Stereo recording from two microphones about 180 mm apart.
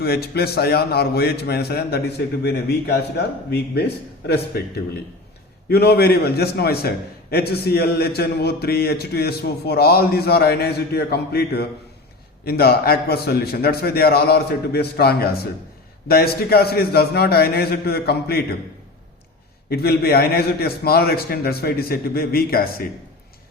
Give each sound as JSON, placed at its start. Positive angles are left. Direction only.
{"t": 0.0, "sound": "a man's voice", "side_deg": 60}
{"t": 19.7, "sound": "a man's voice", "side_deg": 60}